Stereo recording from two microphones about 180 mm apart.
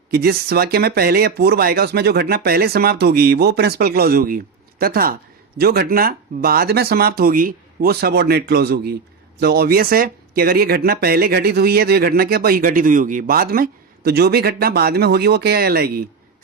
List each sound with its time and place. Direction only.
0.1 s speech: 60° right (ahead or behind)